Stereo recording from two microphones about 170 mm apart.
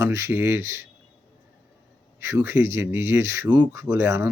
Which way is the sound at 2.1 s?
15° right (ahead or behind).